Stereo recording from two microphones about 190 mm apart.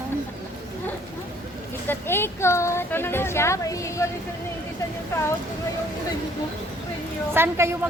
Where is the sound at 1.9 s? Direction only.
10° left (ahead or behind).